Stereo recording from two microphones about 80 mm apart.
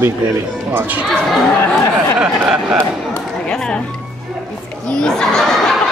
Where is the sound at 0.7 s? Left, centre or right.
Right.